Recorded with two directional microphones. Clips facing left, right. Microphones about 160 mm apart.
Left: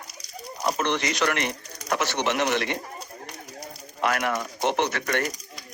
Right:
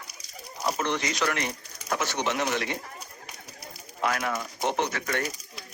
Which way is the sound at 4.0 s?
65° left (ahead or behind).